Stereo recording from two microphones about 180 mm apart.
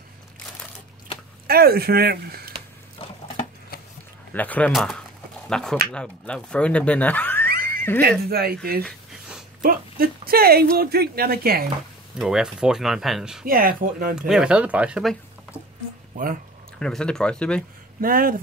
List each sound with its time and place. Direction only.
1.5 s speech: 60° right (ahead or behind)
3.0 s a sound: 30° left (ahead or behind)
4.3 s speech: 10° left (ahead or behind)
7.4 s a sound: 55° right (ahead or behind)
8.0 s speech: 60° right (ahead or behind)
9.6 s speech: 55° right (ahead or behind)
12.2 s speech: 5° right (ahead or behind)
13.5 s speech: 55° right (ahead or behind)
14.1 s speech: 5° right (ahead or behind)
16.8 s speech: 5° left (ahead or behind)
18.0 s speech: 50° right (ahead or behind)